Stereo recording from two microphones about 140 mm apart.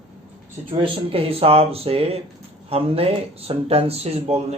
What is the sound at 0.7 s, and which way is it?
Speech, 40° right (ahead or behind).